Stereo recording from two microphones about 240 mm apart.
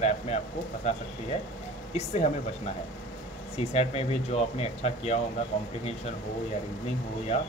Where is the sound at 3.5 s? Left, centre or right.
Left.